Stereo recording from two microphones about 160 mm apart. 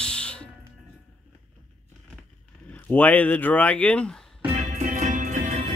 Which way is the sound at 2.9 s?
10° left (ahead or behind).